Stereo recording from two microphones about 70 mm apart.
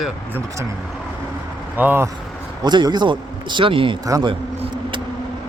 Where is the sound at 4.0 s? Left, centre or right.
Right.